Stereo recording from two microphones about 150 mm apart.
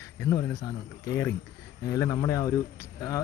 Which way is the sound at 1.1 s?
20° left (ahead or behind).